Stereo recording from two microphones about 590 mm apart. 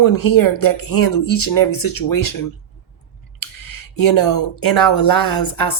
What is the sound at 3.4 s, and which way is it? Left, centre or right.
Speech, left.